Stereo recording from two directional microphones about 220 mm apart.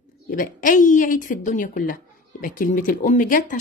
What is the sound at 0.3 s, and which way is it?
Speech, 40° left (ahead or behind).